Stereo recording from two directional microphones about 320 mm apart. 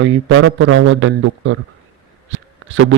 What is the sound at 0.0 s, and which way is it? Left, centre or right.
A man's voice, right.